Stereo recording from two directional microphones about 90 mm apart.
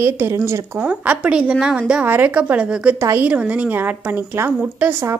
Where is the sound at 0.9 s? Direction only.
15° right (ahead or behind).